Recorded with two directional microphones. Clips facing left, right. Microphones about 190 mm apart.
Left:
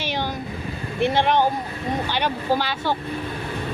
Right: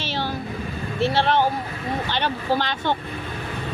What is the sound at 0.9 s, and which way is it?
Speech, 15° left (ahead or behind).